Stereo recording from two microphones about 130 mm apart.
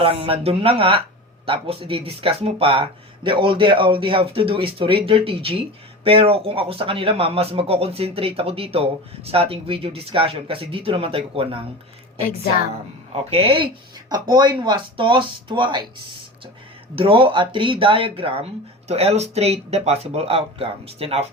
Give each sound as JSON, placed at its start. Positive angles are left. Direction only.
{"t": 0.0, "sound": "a man's voice", "side_deg": -45}
{"t": 13.3, "sound": "a man's voice", "side_deg": -45}
{"t": 14.1, "sound": "speech", "side_deg": -35}
{"t": 16.9, "sound": "a man's voice", "side_deg": -45}